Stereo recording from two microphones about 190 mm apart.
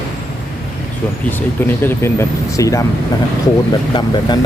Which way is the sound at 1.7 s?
10° left (ahead or behind).